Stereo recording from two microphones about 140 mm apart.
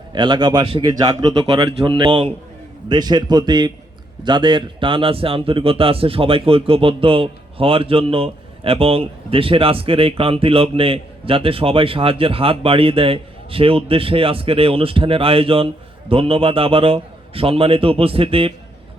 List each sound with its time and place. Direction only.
0.1 s speech: 30° right (ahead or behind)